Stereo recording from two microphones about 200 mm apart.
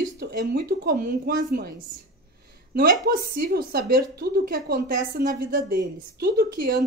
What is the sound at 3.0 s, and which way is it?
A woman's voice, 50° right (ahead or behind).